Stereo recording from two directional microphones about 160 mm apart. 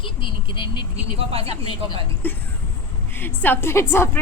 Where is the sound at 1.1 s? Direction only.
35° right (ahead or behind).